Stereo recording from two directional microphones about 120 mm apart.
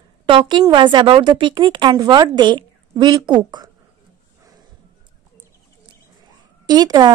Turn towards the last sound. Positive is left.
turn(degrees=-35)  # may be behind; listen again after turning